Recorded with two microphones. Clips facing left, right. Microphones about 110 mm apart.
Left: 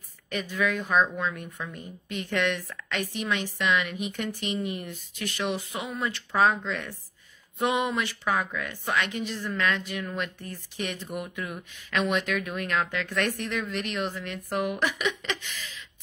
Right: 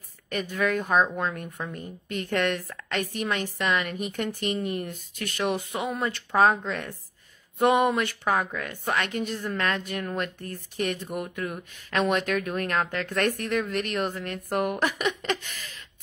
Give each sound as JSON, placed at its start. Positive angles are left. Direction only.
{"t": 0.3, "sound": "speech", "side_deg": -45}